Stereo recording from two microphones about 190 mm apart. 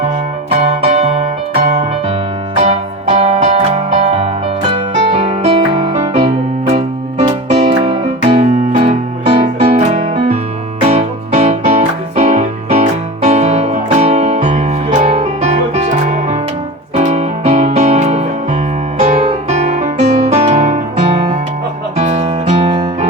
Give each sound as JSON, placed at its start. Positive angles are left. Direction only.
{"t": 0.6, "sound": "music", "side_deg": -30}